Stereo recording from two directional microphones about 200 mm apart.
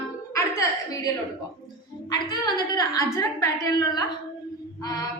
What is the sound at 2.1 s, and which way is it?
A woman's voice, 20° left (ahead or behind).